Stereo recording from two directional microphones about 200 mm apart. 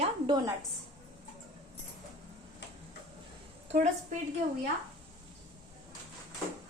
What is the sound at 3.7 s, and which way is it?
Speech, 40° right (ahead or behind).